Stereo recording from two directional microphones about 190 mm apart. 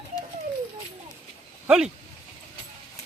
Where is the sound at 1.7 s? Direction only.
5° right (ahead or behind).